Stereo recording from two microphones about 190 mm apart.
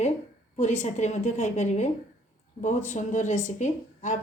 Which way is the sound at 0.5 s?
35° left (ahead or behind).